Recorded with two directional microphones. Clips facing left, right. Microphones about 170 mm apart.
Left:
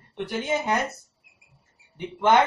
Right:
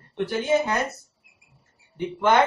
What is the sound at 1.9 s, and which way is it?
Speech, 20° left (ahead or behind).